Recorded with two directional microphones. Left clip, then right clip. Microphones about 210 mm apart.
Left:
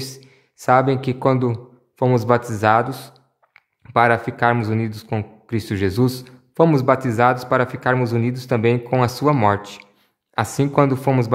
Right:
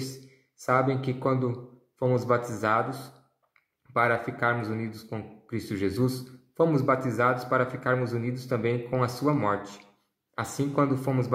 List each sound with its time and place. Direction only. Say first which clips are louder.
0.6 s a man's voice: left 9 dB; 35° left (ahead or behind)